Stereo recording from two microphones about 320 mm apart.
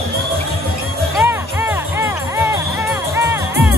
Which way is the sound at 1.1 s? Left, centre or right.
Centre.